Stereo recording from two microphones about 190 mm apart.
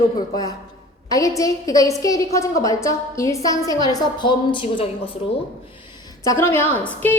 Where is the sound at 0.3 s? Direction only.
20° left (ahead or behind).